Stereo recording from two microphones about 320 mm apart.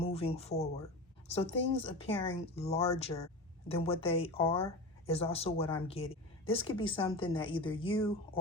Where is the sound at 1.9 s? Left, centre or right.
Centre.